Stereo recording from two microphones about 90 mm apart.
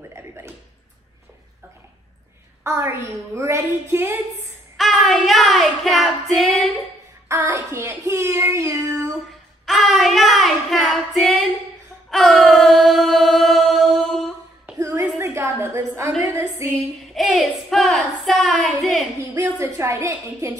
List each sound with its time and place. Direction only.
0.1 s a sound: 30° right (ahead or behind)
2.6 s child singing: 30° right (ahead or behind)
5.0 s child singing: centre (ahead or behind)
7.2 s child singing: 30° right (ahead or behind)
9.7 s child singing: 5° right (ahead or behind)
12.1 s a sound: centre (ahead or behind)
14.8 s a sound: 35° right (ahead or behind)
17.1 s child singing: centre (ahead or behind)
19.3 s child singing: 35° right (ahead or behind)